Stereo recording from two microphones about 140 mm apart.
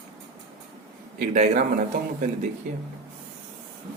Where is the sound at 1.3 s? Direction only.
65° right (ahead or behind).